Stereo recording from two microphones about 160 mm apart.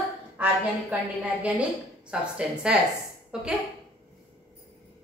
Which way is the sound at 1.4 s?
5° right (ahead or behind).